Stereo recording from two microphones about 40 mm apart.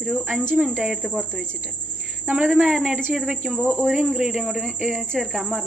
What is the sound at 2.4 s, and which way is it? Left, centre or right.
Speech, centre.